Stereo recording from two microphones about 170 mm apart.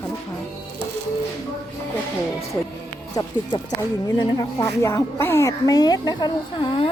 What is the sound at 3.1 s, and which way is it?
A woman's voice, 25° left (ahead or behind).